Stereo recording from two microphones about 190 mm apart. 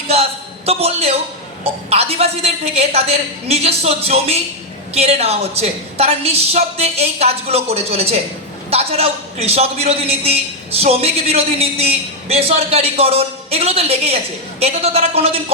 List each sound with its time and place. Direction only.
0.1 s music: 35° right (ahead or behind)
1.9 s a man's voice: 35° right (ahead or behind)